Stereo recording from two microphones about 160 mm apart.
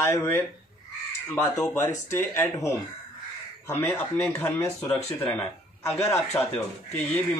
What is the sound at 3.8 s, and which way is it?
Speech, 15° left (ahead or behind).